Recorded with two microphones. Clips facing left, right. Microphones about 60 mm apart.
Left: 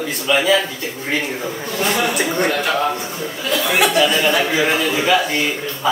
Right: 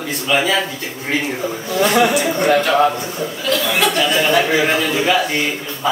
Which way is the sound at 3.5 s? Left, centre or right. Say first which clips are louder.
Left 1 dB; centre.